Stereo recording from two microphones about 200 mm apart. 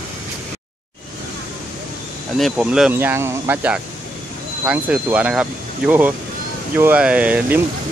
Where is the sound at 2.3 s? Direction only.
Centre (ahead or behind).